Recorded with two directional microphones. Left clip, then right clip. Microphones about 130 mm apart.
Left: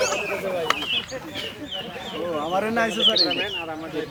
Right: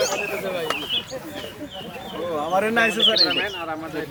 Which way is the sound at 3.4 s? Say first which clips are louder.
Right 1 dB; 40° right (ahead or behind).